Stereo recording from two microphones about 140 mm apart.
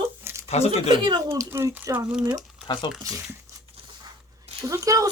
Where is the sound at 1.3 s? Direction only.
15° right (ahead or behind).